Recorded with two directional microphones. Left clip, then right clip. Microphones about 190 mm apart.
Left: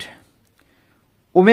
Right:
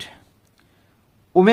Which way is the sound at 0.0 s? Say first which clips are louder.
Left 2 dB; 15° left (ahead or behind).